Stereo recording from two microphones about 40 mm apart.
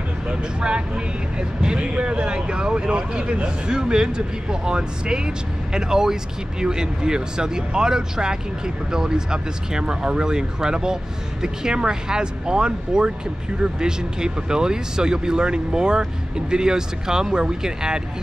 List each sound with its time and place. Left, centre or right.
0.3 s speech: right